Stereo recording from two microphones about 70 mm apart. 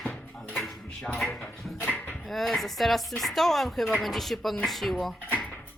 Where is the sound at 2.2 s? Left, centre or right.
Centre.